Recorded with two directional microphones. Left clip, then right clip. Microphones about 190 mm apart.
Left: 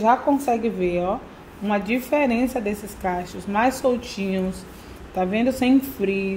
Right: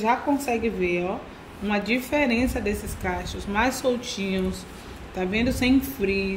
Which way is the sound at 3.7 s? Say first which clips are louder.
Left 3 dB; centre (ahead or behind).